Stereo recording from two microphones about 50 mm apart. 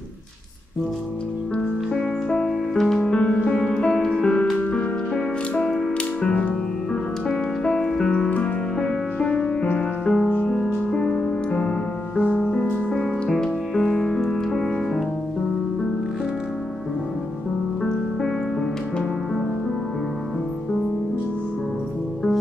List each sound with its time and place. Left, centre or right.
2.0 s music: centre
3.0 s music: left
5.7 s music: centre; by 13.0 s left
13.0 s music: centre